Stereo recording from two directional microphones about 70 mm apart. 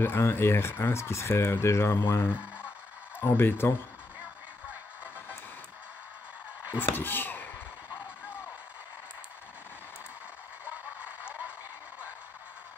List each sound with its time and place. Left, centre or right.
0.0 s speech: left
6.8 s speech: left
11.0 s a sound: right